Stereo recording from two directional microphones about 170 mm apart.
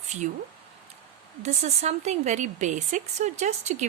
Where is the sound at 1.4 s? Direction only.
40° right (ahead or behind).